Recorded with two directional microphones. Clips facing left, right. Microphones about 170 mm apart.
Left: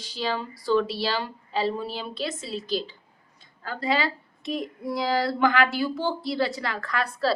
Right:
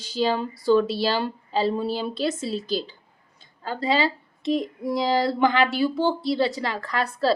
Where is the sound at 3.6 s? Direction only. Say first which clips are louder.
Right 3 dB; 25° right (ahead or behind).